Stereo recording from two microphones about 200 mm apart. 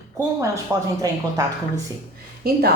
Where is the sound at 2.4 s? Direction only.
50° right (ahead or behind).